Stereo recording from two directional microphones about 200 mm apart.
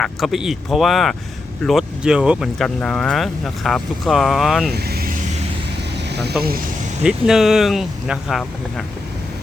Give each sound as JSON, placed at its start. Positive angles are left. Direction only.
{"t": 0.0, "sound": "speech", "side_deg": 0}
{"t": 4.7, "sound": "vehicle", "side_deg": -50}
{"t": 7.0, "sound": "speech", "side_deg": -5}